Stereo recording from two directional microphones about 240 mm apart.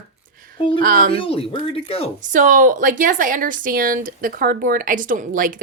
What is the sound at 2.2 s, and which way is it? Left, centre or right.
Speech, right.